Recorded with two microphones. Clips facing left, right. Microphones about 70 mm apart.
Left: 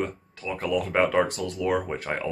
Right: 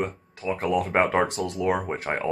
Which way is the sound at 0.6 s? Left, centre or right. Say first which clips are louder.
Right 1 dB; right.